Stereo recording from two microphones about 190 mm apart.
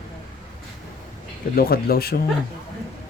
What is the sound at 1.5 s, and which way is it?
Speech, 50° left (ahead or behind).